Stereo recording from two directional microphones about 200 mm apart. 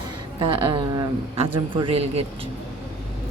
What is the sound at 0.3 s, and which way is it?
A woman's voice, 25° right (ahead or behind).